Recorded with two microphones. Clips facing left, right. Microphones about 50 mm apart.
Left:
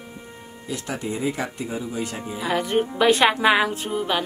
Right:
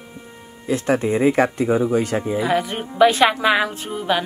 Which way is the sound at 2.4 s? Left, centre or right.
Centre.